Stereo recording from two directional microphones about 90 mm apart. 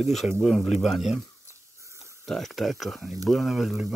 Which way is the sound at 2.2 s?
Centre (ahead or behind).